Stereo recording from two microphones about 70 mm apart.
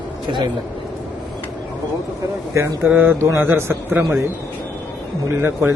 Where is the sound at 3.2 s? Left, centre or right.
Right.